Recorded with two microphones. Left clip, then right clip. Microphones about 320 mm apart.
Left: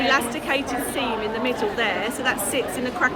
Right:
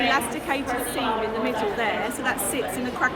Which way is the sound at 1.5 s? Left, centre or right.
Centre.